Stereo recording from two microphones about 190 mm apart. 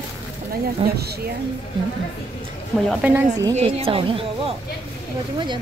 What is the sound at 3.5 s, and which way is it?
Speech, 30° right (ahead or behind).